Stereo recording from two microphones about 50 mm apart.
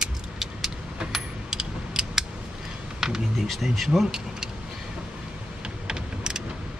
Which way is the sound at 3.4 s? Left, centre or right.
Centre.